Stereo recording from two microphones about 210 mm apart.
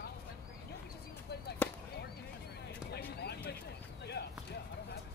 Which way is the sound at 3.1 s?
50° left (ahead or behind).